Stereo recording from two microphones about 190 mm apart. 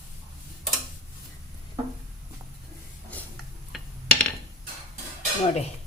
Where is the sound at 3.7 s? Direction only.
Centre (ahead or behind).